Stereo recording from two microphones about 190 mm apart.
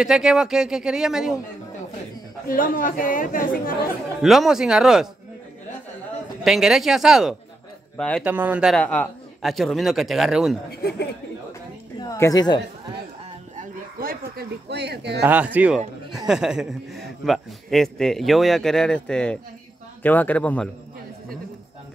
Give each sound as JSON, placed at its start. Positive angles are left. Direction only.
{"t": 0.0, "sound": "a man's voice", "side_deg": 0}
{"t": 2.4, "sound": "speech", "side_deg": 50}
{"t": 4.2, "sound": "a man's voice", "side_deg": 0}
{"t": 6.4, "sound": "a man's voice", "side_deg": 0}
{"t": 8.7, "sound": "a man's voice", "side_deg": 5}
{"t": 10.7, "sound": "speech", "side_deg": 55}
{"t": 12.0, "sound": "a sound", "side_deg": 20}
{"t": 13.6, "sound": "a sound", "side_deg": -50}
{"t": 15.2, "sound": "a man's voice", "side_deg": -10}